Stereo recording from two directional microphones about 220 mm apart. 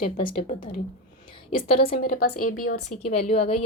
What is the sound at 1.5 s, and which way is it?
Speech, 25° left (ahead or behind).